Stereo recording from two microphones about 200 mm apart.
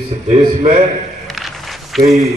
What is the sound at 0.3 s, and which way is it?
Speech, 30° right (ahead or behind).